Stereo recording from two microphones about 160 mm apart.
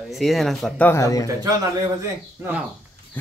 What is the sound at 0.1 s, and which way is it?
Speech, centre (ahead or behind).